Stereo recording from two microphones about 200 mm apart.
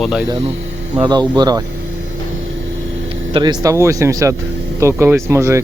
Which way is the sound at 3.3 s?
20° right (ahead or behind).